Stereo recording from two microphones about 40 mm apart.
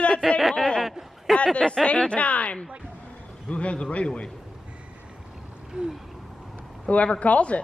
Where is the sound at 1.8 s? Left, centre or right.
Left.